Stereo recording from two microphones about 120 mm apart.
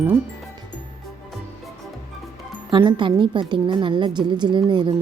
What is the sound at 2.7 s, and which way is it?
A woman's voice, 40° right (ahead or behind).